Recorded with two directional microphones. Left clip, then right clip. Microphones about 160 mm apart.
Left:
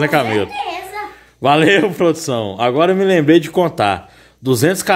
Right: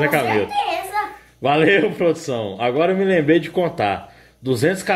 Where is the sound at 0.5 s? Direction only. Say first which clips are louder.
Right 2 dB; 20° right (ahead or behind).